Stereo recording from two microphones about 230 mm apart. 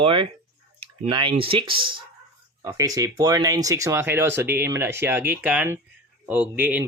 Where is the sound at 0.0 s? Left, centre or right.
Right.